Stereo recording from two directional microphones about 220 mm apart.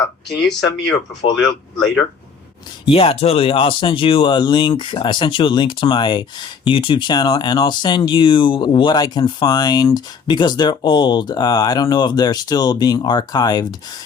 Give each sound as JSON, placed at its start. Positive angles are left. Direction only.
{"t": 1.4, "sound": "speech", "side_deg": 0}
{"t": 2.9, "sound": "speech", "side_deg": 25}